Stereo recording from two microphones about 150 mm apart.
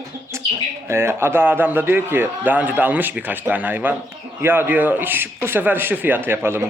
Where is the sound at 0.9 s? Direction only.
15° right (ahead or behind).